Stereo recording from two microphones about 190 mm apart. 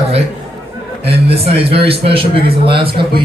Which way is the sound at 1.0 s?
30° right (ahead or behind).